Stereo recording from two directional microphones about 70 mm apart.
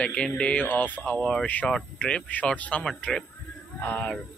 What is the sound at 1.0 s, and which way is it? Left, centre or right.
Speech, centre.